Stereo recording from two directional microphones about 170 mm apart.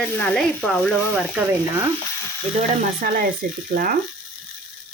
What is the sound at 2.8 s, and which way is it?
Speech, 55° right (ahead or behind).